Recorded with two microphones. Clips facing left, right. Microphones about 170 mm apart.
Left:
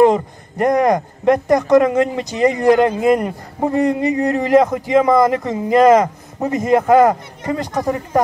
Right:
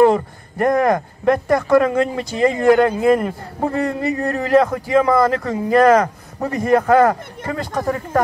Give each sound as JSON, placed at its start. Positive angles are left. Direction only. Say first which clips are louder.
{"t": 0.0, "sound": "speech", "louder": "left 1 dB", "side_deg": 20}